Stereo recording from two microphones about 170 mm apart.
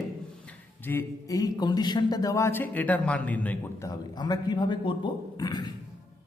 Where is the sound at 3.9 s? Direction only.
25° left (ahead or behind).